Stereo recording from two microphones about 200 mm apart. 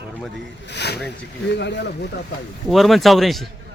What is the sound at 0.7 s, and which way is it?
Speech, 55° left (ahead or behind).